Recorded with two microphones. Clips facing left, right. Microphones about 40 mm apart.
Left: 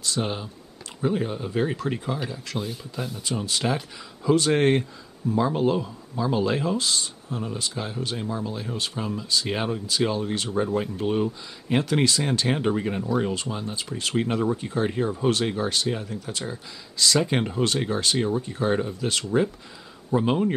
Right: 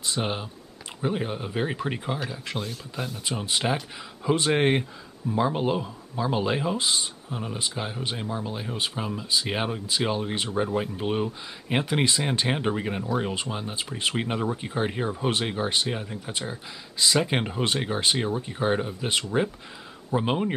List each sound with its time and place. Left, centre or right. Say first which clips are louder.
0.0 s speech: left 1 dB; right
13.3 s speech: left 1 dB; right
14.2 s speech: left 3 dB; centre